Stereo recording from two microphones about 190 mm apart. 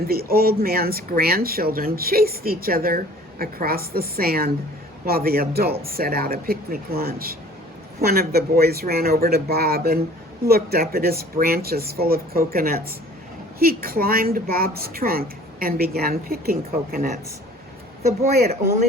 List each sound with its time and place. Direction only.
0.1 s speech: 55° right (ahead or behind)